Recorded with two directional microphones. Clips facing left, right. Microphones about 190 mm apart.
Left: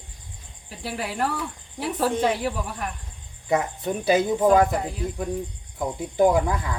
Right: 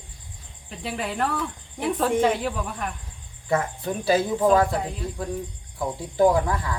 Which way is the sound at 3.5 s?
20° left (ahead or behind).